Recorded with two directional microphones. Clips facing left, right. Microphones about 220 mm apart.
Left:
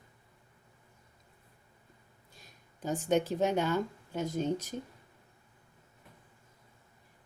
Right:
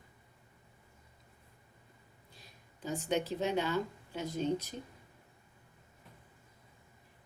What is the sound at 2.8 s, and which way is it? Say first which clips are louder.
Speech: left 5 dB; 45° left (ahead or behind).